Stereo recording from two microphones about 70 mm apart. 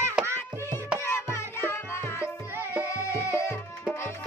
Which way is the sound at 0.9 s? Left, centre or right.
Left.